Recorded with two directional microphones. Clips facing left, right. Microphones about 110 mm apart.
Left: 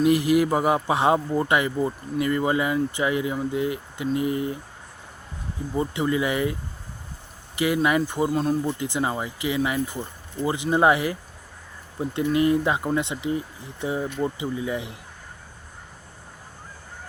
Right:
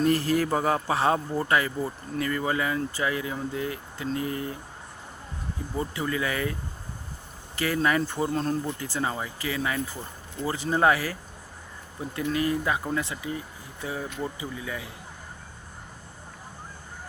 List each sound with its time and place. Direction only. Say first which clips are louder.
0.0 s speech: left 4 dB; 15° left (ahead or behind)
5.7 s speech: left 6 dB; 20° left (ahead or behind)